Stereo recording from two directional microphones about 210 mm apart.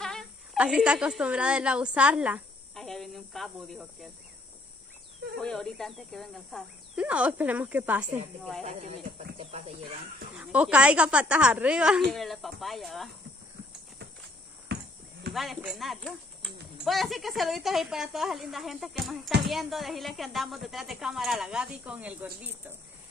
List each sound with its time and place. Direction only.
0.0 s a woman's voice: centre (ahead or behind)
5.4 s speech: centre (ahead or behind)
8.6 s speech: 30° right (ahead or behind)
10.3 s speech: 5° right (ahead or behind)
14.7 s a sound: 50° right (ahead or behind)
15.3 s speech: centre (ahead or behind)